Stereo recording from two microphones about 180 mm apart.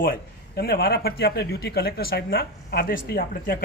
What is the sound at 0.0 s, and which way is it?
A man's voice, 55° left (ahead or behind).